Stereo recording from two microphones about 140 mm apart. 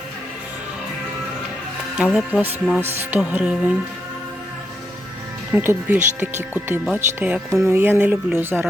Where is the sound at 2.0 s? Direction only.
5° right (ahead or behind).